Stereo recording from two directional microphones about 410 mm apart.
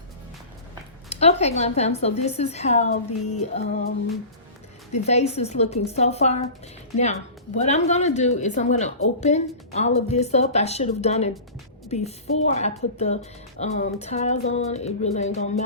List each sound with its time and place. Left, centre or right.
1.1 s a woman's voice: centre